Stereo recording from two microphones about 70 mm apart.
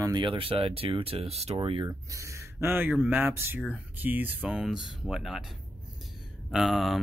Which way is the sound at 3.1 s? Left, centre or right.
Right.